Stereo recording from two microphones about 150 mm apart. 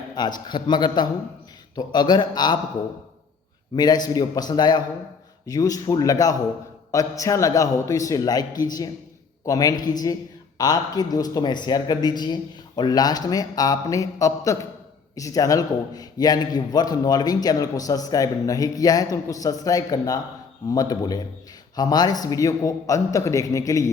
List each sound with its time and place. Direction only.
0.1 s a man's voice: 30° left (ahead or behind)
3.8 s a man's voice: 25° left (ahead or behind)